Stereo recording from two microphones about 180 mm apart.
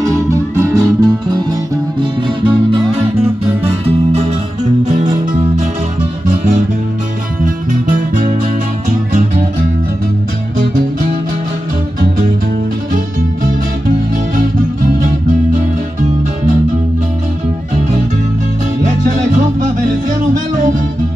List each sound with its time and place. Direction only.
0.0 s music: 15° right (ahead or behind)
2.0 s music: 30° right (ahead or behind)
12.9 s music: 50° right (ahead or behind)
18.8 s music: 45° right (ahead or behind)